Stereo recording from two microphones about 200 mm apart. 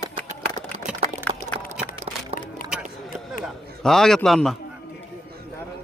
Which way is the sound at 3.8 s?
Centre (ahead or behind).